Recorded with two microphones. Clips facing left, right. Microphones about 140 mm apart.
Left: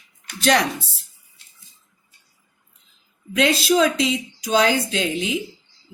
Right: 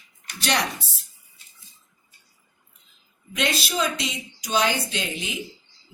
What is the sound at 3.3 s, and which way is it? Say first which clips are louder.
A woman's voice: left 8 dB; 90° left.